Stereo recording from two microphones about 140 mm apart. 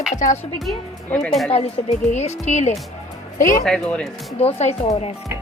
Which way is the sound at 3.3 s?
75° left (ahead or behind).